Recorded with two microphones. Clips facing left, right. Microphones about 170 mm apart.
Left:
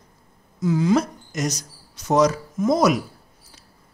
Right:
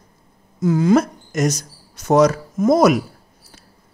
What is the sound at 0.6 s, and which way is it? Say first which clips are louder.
Speech: right 4 dB; 50° right (ahead or behind).